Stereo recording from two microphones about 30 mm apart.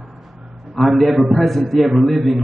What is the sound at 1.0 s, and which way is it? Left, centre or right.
A man's voice, centre.